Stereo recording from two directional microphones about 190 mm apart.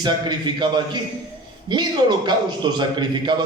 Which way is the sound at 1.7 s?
25° right (ahead or behind).